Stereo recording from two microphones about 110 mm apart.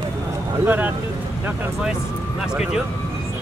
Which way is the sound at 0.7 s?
15° right (ahead or behind).